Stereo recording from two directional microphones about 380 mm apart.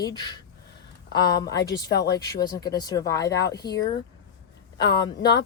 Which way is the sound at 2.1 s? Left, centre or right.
Centre.